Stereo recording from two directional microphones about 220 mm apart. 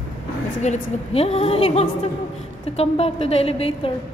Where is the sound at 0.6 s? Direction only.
30° left (ahead or behind).